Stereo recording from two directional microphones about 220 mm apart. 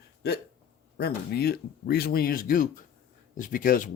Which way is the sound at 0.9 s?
45° left (ahead or behind).